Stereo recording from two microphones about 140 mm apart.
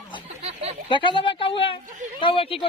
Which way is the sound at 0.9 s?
35° left (ahead or behind).